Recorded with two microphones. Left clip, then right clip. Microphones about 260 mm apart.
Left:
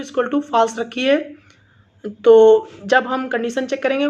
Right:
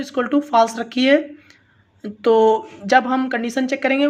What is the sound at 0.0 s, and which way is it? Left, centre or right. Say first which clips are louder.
Speech: even; centre.